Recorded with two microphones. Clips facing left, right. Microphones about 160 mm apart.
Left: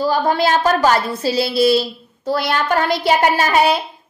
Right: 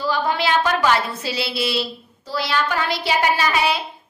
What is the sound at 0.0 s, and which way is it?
A woman's voice, 40° left (ahead or behind).